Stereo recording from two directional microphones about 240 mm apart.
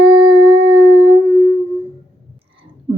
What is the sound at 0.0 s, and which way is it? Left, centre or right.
Howl, right.